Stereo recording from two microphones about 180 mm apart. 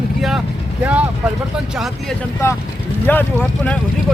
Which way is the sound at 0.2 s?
Centre (ahead or behind).